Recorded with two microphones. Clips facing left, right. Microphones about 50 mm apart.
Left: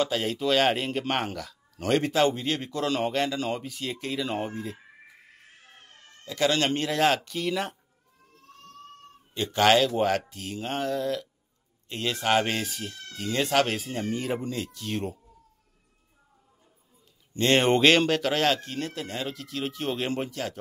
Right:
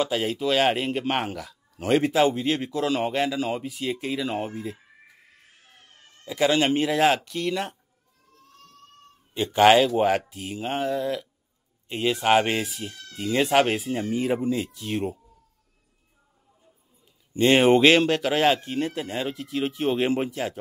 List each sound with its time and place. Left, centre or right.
0.0 s speech: centre
6.2 s speech: centre
9.3 s speech: centre
13.1 s speech: centre
17.3 s speech: centre